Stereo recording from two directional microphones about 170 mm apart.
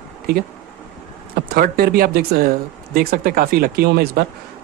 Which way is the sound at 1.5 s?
60° right (ahead or behind).